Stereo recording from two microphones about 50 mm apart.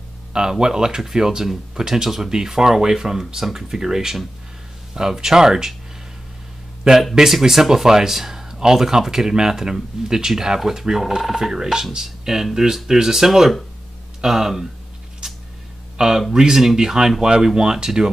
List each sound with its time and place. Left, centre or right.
0.3 s speech: centre
6.8 s a man's voice: centre
7.2 s speech: centre
16.0 s speech: centre